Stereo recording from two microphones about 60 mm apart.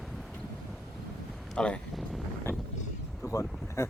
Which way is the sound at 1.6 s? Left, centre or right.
Centre.